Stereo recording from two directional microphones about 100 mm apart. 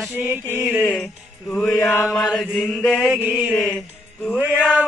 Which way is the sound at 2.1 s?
5° left (ahead or behind).